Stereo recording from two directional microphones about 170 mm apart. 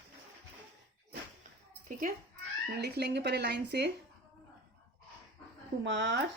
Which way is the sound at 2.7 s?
70° right (ahead or behind).